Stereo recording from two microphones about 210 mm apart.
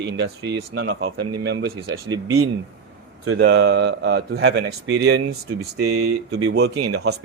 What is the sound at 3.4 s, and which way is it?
Speech, 50° right (ahead or behind).